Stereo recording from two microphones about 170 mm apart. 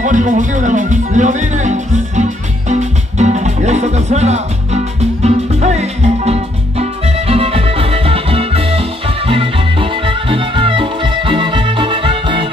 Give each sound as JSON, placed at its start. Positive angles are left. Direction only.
{"t": 0.0, "sound": "music", "side_deg": -50}